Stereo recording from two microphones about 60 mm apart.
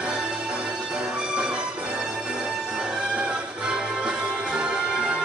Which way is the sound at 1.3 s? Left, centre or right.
Centre.